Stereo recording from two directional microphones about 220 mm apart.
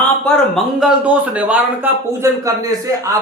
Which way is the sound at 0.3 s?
Centre (ahead or behind).